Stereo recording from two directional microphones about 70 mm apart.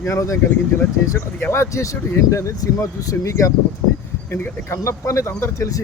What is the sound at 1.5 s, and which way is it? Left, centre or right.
Speech, left.